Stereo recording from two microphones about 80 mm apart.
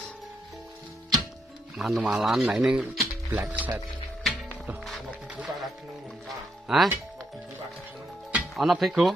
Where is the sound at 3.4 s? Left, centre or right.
Right.